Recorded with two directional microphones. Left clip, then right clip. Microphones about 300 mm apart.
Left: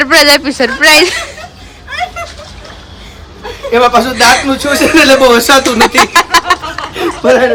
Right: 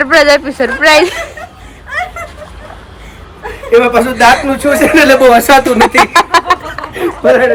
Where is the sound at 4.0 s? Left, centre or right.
Centre.